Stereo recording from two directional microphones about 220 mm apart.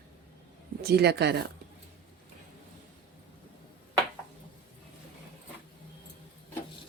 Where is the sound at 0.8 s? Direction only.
45° right (ahead or behind).